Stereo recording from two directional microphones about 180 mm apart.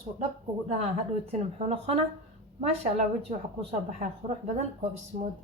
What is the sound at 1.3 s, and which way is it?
Speech, 35° right (ahead or behind).